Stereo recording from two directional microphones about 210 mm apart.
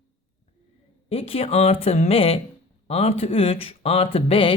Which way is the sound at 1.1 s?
25° left (ahead or behind).